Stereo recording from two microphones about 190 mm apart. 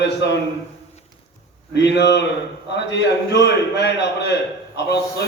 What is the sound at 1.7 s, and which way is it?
A man's voice, 65° left (ahead or behind).